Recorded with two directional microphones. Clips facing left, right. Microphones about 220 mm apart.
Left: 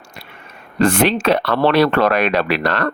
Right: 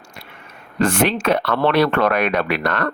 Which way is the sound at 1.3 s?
35° left (ahead or behind).